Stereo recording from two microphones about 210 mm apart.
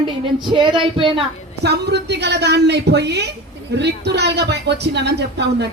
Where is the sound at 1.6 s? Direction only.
50° right (ahead or behind).